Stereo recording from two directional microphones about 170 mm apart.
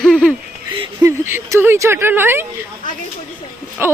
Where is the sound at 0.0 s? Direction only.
Centre (ahead or behind).